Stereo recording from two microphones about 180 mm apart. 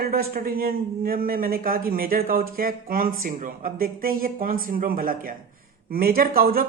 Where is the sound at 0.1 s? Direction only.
55° right (ahead or behind).